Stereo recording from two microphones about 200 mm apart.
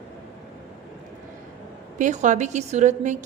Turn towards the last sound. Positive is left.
turn(degrees=-35)  # may be behind; listen again after turning